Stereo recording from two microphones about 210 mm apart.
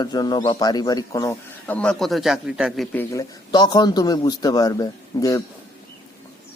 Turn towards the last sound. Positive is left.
turn(degrees=15)  # may be behind; listen again after turning